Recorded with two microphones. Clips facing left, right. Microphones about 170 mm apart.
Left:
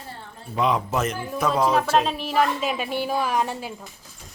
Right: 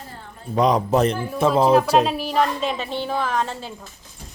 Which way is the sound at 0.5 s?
40° right (ahead or behind).